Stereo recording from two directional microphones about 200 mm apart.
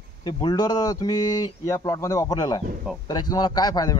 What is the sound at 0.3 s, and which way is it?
Speech, 20° left (ahead or behind).